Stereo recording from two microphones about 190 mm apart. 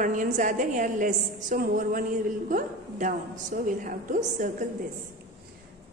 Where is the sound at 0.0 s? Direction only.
45° right (ahead or behind).